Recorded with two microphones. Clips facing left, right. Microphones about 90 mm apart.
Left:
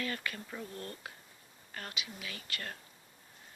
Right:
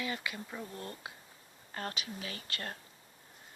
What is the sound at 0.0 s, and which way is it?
Speech, 15° right (ahead or behind).